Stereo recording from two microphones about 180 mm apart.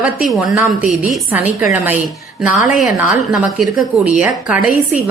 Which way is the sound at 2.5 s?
45° left (ahead or behind).